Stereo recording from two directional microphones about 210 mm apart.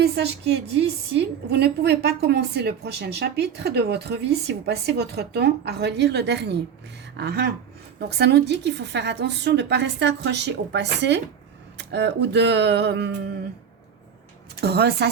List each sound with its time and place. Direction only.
0.0 s a woman's voice: 50° right (ahead or behind)
14.6 s a woman's voice: 50° right (ahead or behind)